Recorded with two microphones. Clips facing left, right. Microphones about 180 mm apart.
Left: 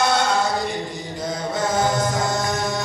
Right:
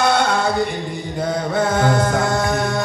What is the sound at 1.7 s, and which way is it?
Music, 60° right (ahead or behind).